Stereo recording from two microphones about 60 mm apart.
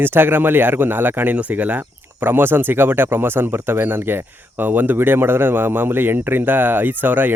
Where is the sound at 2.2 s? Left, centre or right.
Right.